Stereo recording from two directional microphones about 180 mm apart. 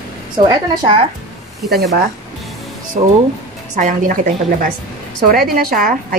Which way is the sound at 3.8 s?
45° right (ahead or behind).